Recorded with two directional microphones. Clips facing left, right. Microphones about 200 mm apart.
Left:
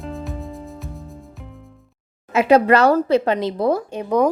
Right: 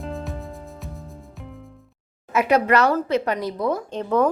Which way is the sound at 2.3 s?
30° left (ahead or behind).